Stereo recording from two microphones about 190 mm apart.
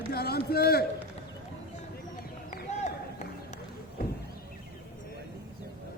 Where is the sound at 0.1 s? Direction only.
55° left (ahead or behind).